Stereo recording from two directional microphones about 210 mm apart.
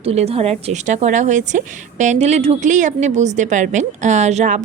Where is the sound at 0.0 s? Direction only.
30° right (ahead or behind).